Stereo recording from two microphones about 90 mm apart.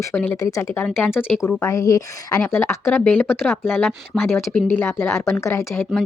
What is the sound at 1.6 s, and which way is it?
Speech, 35° left (ahead or behind).